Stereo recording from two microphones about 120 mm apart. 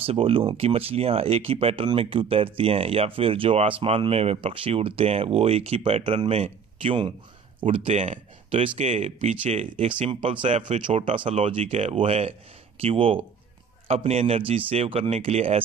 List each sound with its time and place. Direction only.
0.0 s speech: 50° right (ahead or behind)
7.7 s speech: 60° right (ahead or behind)
8.5 s speech: 60° right (ahead or behind)
9.4 s speech: 60° right (ahead or behind)
10.5 s speech: 90° right
10.9 s speech: 55° right (ahead or behind)